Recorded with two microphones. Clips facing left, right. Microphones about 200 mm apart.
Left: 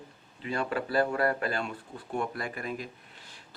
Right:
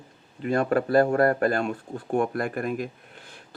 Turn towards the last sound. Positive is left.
turn(degrees=-50)  # may be behind; listen again after turning